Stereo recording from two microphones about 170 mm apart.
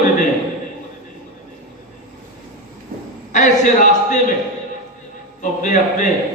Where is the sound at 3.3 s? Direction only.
45° left (ahead or behind).